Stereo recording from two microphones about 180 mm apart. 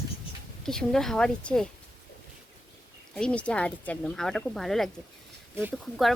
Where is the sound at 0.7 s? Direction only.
5° left (ahead or behind).